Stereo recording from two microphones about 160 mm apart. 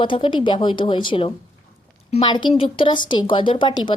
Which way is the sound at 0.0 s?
30° left (ahead or behind).